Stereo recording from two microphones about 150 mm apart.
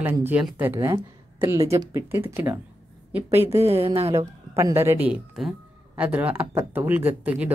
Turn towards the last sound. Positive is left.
turn(degrees=-10)  # may be behind; listen again after turning